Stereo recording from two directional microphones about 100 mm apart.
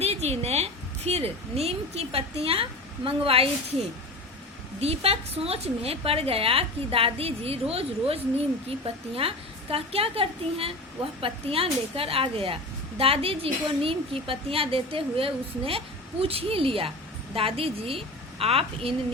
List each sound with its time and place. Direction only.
0.0 s a woman's voice: 90° right
2.4 s a woman's voice: 70° right (ahead or behind)
4.8 s a woman's voice: 90° right; by 18.9 s 70° right (ahead or behind)